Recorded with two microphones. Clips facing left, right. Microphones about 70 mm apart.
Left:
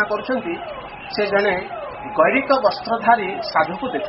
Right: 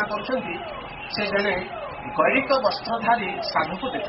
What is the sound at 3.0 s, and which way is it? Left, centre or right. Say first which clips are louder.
Speech: left 6 dB; left.